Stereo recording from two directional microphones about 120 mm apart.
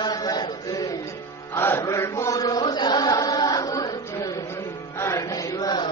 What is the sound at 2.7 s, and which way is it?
Music, 35° left (ahead or behind).